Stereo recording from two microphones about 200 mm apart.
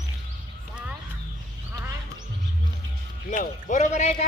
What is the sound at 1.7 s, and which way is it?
Speech, 15° right (ahead or behind).